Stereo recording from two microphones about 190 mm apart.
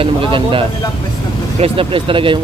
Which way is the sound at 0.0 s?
25° right (ahead or behind).